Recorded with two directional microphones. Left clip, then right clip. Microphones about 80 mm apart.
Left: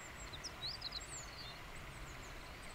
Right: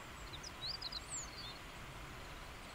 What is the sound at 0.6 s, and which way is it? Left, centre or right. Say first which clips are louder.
Vehicle: right 1 dB; right.